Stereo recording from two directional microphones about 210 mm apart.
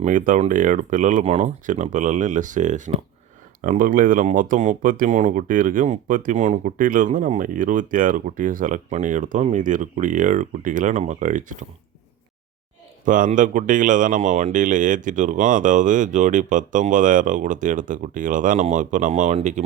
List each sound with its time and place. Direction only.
0.0 s speech: 35° right (ahead or behind)
13.1 s speech: 40° right (ahead or behind)